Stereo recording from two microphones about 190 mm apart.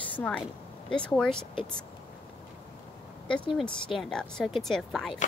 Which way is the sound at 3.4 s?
Centre (ahead or behind).